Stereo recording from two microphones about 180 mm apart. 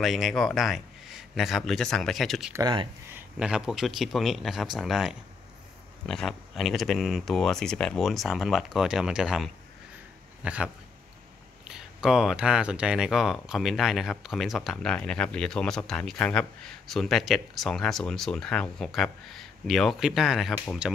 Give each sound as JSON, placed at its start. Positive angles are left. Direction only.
{"t": 0.0, "sound": "speech", "side_deg": 0}
{"t": 2.5, "sound": "speech", "side_deg": -25}
{"t": 3.2, "sound": "speech", "side_deg": -5}